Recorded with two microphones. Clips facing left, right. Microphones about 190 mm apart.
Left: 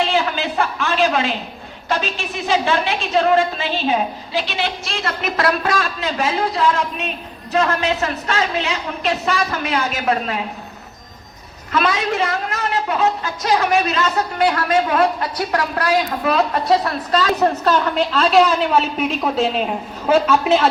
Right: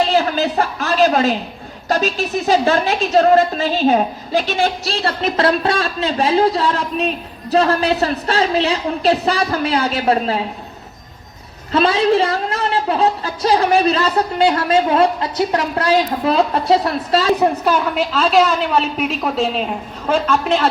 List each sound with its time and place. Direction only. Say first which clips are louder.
0.0 s a woman's voice: right 3 dB; 40° right (ahead or behind)
11.7 s a woman's voice: right 5 dB; 30° right (ahead or behind)
17.4 s a woman's voice: right 1 dB; 10° right (ahead or behind)